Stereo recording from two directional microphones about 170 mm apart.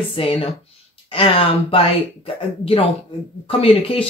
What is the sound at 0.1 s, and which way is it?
Speech, 35° left (ahead or behind).